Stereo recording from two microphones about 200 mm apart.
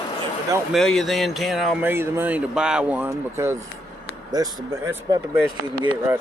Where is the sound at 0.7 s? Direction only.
Centre (ahead or behind).